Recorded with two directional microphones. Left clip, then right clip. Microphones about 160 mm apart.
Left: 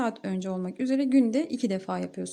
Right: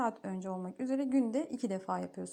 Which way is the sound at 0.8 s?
5° left (ahead or behind).